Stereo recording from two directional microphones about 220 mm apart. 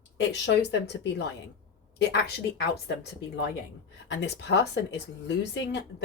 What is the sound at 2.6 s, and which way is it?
Speech, 50° left (ahead or behind).